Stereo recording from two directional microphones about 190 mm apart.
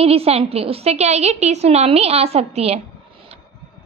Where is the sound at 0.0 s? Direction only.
30° right (ahead or behind).